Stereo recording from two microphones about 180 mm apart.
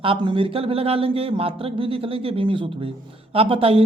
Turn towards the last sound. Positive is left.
turn(degrees=-30)  # may be behind; listen again after turning